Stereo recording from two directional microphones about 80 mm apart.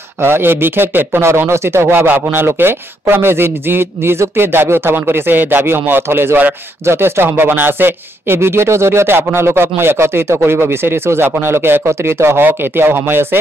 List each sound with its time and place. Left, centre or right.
0.2 s speech: right